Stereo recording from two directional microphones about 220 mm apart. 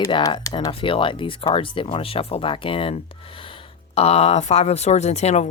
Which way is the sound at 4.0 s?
25° left (ahead or behind).